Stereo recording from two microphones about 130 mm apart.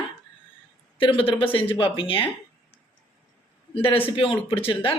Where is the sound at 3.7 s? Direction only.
45° left (ahead or behind).